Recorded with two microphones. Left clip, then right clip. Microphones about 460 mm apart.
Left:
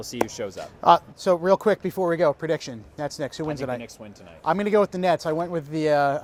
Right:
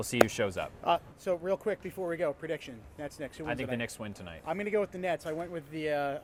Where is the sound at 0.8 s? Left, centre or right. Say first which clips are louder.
Left 14 dB; left.